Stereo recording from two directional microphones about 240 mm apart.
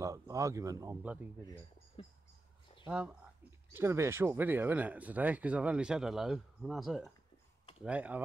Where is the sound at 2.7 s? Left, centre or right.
Left.